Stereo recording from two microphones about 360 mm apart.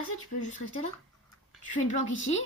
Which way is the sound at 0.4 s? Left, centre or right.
Centre.